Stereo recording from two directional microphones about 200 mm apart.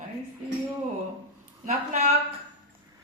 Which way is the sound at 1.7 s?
35° right (ahead or behind).